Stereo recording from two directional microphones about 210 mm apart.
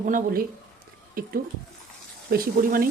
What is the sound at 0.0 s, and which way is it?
Speech, 40° right (ahead or behind).